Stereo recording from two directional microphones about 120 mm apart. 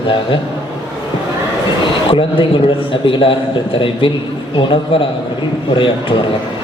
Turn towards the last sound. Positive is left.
turn(degrees=45)  # may be behind; listen again after turning